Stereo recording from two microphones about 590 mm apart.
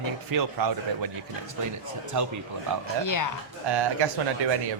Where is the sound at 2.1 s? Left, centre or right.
Right.